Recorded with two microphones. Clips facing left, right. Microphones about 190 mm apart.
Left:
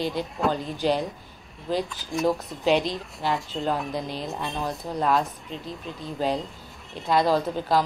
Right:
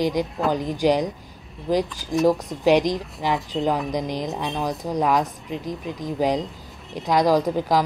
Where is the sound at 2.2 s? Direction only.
15° right (ahead or behind).